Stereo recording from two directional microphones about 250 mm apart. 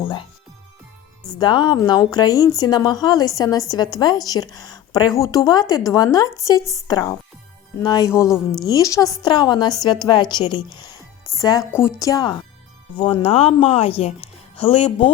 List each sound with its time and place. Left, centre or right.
0.0 s speech: centre
1.4 s a woman's voice: centre